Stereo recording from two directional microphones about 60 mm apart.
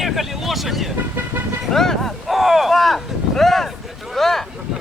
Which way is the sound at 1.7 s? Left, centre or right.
Centre.